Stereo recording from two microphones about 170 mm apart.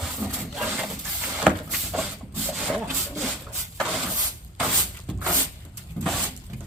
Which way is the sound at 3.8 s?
Centre (ahead or behind).